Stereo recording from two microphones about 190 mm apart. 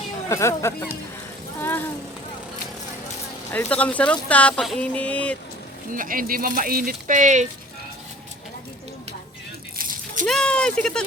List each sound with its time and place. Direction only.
0.3 s speech: 15° left (ahead or behind)
3.5 s speech: 10° left (ahead or behind)
5.9 s speech: 45° right (ahead or behind)
9.7 s rattle: 45° right (ahead or behind)
10.2 s speech: 5° left (ahead or behind)